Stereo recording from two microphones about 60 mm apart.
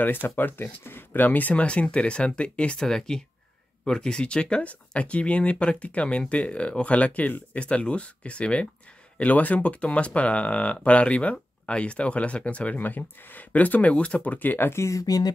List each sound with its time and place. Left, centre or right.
0.0 s speech: left
14.7 s speech: left